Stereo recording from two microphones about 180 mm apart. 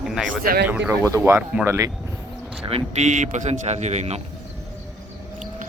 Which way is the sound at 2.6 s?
35° right (ahead or behind).